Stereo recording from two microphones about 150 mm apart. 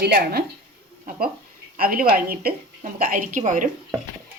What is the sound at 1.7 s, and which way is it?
Speech, 75° right (ahead or behind).